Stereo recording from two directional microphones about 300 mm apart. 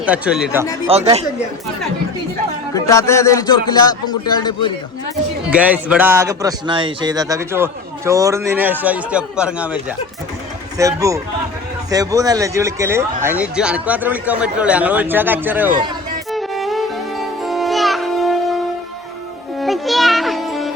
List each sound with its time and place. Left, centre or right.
0.0 s a man's voice: centre
0.9 s speech: centre
2.7 s a man's voice: centre
5.5 s a man's voice: centre
16.3 s music: centre